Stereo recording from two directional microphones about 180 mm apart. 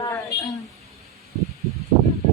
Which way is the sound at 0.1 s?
20° left (ahead or behind).